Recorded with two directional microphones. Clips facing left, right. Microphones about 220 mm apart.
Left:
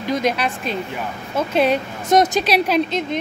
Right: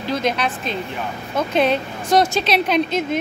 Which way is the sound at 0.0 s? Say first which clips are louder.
Left 1 dB; 10° left (ahead or behind).